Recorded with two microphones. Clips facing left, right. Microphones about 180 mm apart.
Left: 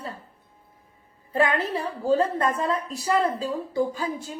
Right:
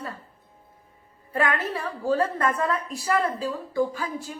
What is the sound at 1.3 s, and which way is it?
A woman's voice, 25° left (ahead or behind).